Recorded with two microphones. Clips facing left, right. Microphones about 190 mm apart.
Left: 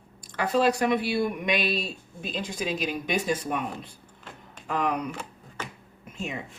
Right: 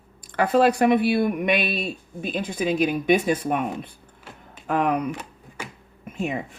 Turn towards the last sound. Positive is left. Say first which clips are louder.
# right 7 dB
turn(degrees=-55)  # may be behind; listen again after turning